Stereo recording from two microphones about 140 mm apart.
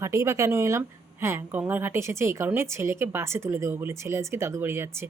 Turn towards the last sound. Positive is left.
turn(degrees=-15)  # may be behind; listen again after turning